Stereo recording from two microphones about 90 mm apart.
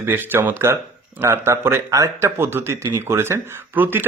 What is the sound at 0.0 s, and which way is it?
A man's voice, 20° right (ahead or behind).